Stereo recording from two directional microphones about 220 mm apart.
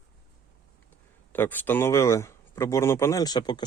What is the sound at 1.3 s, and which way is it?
Speech, 10° left (ahead or behind).